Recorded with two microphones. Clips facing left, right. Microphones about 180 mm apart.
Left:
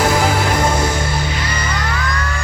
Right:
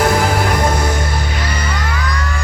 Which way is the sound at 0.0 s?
55° right (ahead or behind).